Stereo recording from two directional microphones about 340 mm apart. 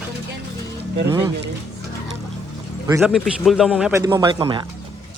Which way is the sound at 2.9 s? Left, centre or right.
Centre.